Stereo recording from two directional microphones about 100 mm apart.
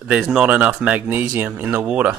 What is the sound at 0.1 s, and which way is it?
Speech, 5° right (ahead or behind).